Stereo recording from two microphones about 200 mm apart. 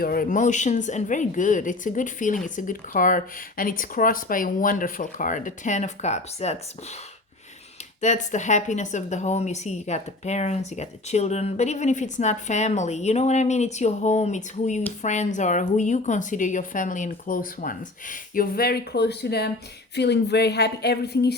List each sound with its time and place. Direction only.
0.0 s a woman's voice: 45° left (ahead or behind)
8.0 s a woman's voice: 35° left (ahead or behind); by 21.3 s 55° left (ahead or behind)